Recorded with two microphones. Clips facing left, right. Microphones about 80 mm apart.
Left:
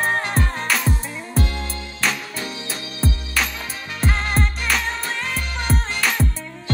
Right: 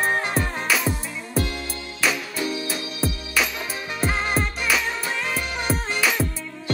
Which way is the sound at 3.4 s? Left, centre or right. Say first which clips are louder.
Right 2 dB; centre.